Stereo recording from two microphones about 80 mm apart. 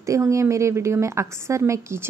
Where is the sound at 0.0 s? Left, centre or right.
Right.